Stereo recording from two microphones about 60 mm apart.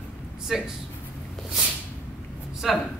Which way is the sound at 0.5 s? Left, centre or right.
Centre.